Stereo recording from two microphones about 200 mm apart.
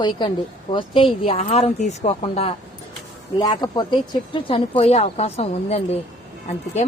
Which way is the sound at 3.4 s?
20° left (ahead or behind).